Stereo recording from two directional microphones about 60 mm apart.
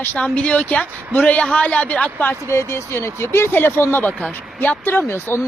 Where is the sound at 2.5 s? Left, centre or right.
Left.